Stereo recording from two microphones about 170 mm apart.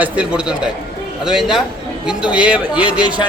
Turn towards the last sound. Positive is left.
turn(degrees=-5)  # may be behind; listen again after turning